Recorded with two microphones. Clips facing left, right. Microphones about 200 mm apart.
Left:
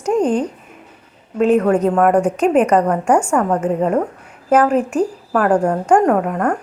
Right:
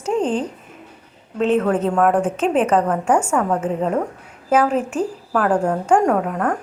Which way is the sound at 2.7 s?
5° left (ahead or behind).